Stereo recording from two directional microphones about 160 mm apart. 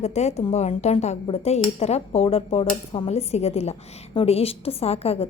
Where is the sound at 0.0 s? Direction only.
45° left (ahead or behind).